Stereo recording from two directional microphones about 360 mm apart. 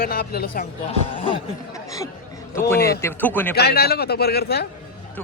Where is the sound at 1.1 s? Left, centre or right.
Centre.